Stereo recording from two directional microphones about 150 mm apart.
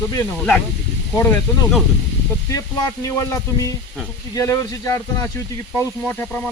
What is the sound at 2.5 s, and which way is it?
Speech, 25° left (ahead or behind).